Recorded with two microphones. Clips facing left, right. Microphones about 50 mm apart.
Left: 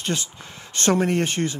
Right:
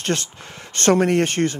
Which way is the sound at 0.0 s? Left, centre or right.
Right.